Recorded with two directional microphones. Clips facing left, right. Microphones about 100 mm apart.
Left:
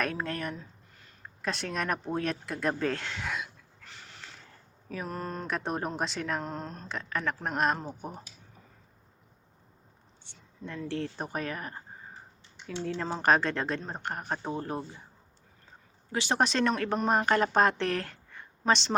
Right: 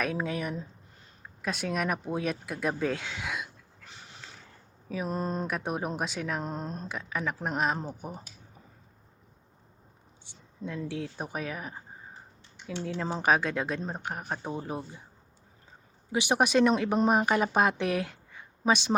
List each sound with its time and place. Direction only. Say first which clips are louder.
0.0 s speech: right 1 dB; 5° right (ahead or behind)
3.8 s a sound: even; 20° right (ahead or behind)
5.0 s speech: right 5 dB; 20° right (ahead or behind)
5.5 s speech: even; 5° right (ahead or behind)
6.4 s speech: right 2 dB; 20° right (ahead or behind)
10.8 s speech: left 1 dB; 5° right (ahead or behind)
16.1 s speech: right 3 dB; 15° right (ahead or behind)